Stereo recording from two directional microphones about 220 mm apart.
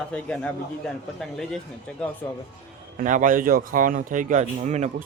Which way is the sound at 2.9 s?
35° right (ahead or behind).